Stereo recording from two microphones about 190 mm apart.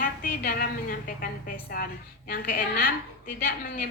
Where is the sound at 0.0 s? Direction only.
50° left (ahead or behind).